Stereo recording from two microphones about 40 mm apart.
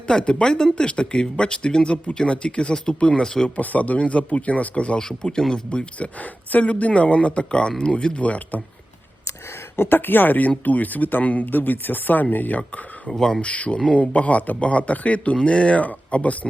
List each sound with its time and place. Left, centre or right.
0.1 s speech: left
3.6 s speech: left
4.9 s speech: centre
5.7 s speech: left
9.7 s speech: left
11.5 s speech: left
13.1 s speech: centre
13.4 s speech: left